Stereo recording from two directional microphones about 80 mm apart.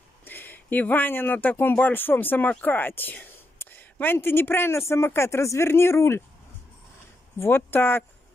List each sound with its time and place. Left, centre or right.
0.2 s speech: left
7.3 s speech: left